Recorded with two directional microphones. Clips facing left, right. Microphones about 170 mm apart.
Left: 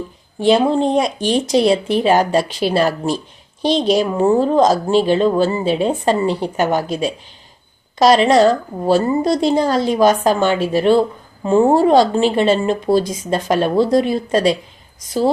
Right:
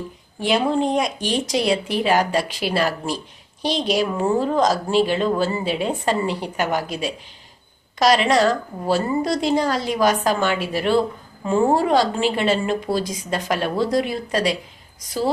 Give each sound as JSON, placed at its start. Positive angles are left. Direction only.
{"t": 0.3, "sound": "a woman's voice", "side_deg": 30}